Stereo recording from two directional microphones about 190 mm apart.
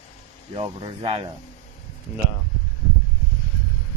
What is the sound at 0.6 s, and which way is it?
Speech, 25° right (ahead or behind).